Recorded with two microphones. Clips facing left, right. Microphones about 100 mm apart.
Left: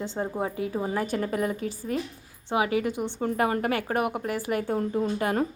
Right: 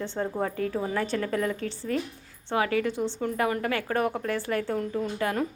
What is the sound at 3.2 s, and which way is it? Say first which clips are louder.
A woman's voice: left 4 dB; 30° left (ahead or behind).